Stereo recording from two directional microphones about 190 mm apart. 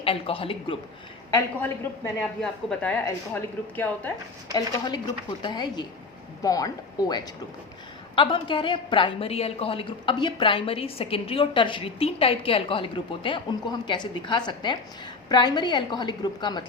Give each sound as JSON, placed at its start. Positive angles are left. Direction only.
{"t": 0.0, "sound": "a woman's voice", "side_deg": 30}
{"t": 1.3, "sound": "speech", "side_deg": 15}
{"t": 2.4, "sound": "speech", "side_deg": 5}
{"t": 5.4, "sound": "a woman's voice", "side_deg": 25}